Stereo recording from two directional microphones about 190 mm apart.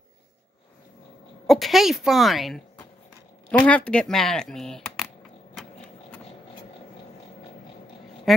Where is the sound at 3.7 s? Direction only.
5° left (ahead or behind).